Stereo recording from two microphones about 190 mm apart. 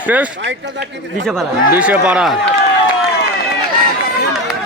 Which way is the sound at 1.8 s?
5° right (ahead or behind).